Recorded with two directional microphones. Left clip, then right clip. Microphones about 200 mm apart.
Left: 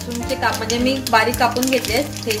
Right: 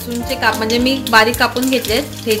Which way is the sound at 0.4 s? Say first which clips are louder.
Right 5 dB; 45° right (ahead or behind).